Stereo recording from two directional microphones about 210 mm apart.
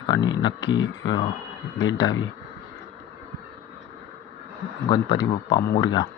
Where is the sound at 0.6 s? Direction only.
60° left (ahead or behind).